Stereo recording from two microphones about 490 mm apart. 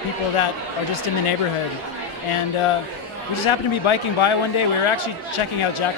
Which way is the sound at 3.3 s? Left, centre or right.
Left.